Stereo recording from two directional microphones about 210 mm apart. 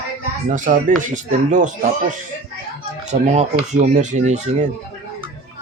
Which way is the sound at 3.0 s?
35° right (ahead or behind).